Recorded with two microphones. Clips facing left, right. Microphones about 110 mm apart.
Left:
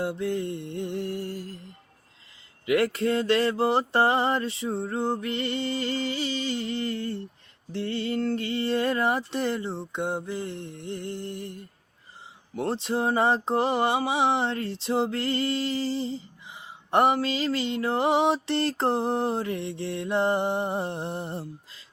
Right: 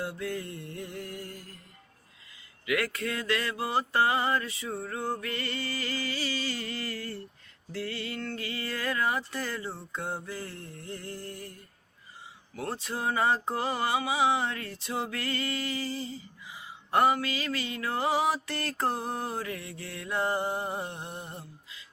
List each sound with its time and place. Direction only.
0.0 s mantra: 25° left (ahead or behind)
2.6 s mantra: 30° left (ahead or behind)